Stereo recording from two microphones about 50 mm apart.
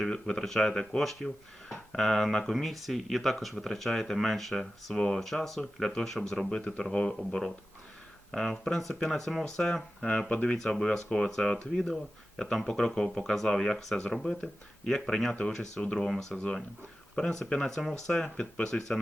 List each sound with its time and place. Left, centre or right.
0.1 s speech: centre
8.3 s speech: centre
10.2 s speech: left
10.6 s speech: centre